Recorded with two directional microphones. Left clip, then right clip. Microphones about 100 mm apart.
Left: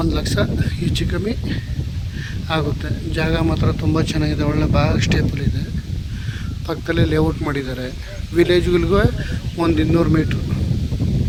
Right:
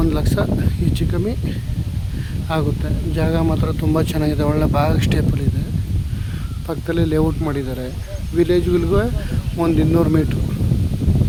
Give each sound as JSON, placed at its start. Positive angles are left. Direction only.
{"t": 0.1, "sound": "speech", "side_deg": -10}
{"t": 3.5, "sound": "speech", "side_deg": -30}
{"t": 6.7, "sound": "speech", "side_deg": 0}
{"t": 7.3, "sound": "speech", "side_deg": 20}